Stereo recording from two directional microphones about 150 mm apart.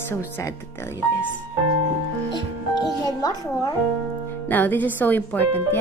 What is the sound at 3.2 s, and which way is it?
Speech, 25° left (ahead or behind).